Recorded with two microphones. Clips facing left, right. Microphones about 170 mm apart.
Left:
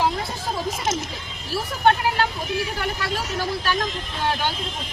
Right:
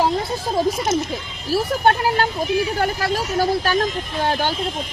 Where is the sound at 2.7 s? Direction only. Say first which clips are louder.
Right 6 dB; 40° right (ahead or behind).